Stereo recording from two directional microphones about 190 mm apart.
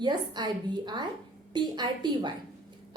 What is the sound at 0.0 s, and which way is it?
Speech, 25° right (ahead or behind).